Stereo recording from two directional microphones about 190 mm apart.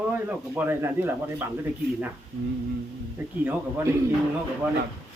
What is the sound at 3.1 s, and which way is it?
Speech, 10° right (ahead or behind).